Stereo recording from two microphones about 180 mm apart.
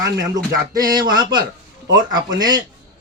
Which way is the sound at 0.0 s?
20° right (ahead or behind).